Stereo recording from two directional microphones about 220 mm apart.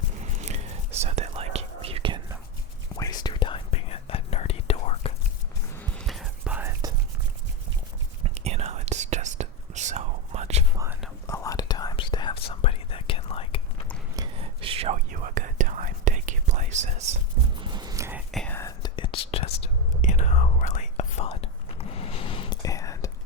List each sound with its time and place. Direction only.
0.3 s whispering: 30° right (ahead or behind)
2.9 s whispering: 15° left (ahead or behind)
5.7 s whispering: centre (ahead or behind)
8.2 s whispering: 30° right (ahead or behind)
11.3 s whispering: 15° left (ahead or behind)
14.2 s whispering: 25° right (ahead or behind)
17.6 s a sound: 20° right (ahead or behind)
18.3 s whispering: 5° left (ahead or behind)